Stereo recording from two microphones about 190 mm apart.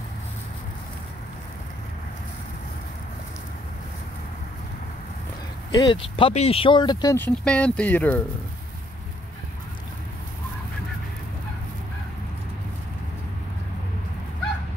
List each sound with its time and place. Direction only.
5.7 s speech: 25° left (ahead or behind); by 8.2 s 10° left (ahead or behind)